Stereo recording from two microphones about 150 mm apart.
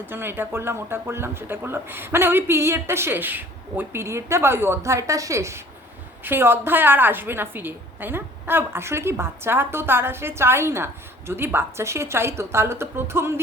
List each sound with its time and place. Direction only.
0.0 s speech: 15° right (ahead or behind)